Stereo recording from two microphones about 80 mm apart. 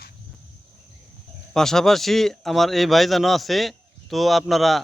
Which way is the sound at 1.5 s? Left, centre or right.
Centre.